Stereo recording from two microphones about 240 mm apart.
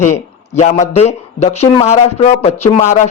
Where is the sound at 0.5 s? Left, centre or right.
Left.